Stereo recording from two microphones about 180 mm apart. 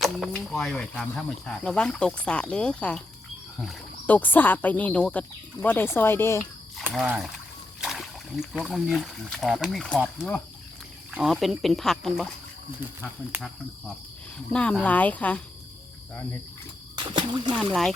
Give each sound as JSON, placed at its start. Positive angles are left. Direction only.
{"t": 0.5, "sound": "speech", "side_deg": 0}
{"t": 6.7, "sound": "a sound", "side_deg": 0}
{"t": 7.8, "sound": "speech", "side_deg": 0}
{"t": 14.5, "sound": "speech", "side_deg": 5}
{"t": 16.9, "sound": "speech", "side_deg": -25}
{"t": 17.7, "sound": "speech", "side_deg": 0}